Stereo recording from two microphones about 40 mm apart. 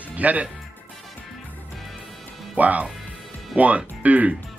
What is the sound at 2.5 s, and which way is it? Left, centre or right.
Speech, right.